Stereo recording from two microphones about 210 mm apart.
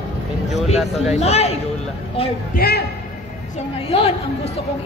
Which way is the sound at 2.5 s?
50° left (ahead or behind).